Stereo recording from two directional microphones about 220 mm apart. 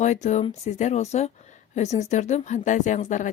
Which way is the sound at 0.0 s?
30° left (ahead or behind).